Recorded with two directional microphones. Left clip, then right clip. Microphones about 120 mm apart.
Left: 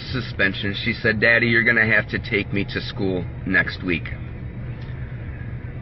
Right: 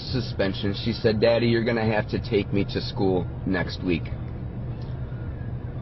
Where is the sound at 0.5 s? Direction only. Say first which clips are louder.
Left 5 dB; 20° right (ahead or behind).